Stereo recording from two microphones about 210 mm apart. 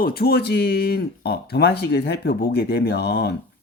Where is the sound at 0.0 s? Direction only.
45° left (ahead or behind).